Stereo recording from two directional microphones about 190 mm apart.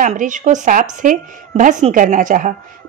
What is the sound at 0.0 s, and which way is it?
A woman's voice, 40° right (ahead or behind).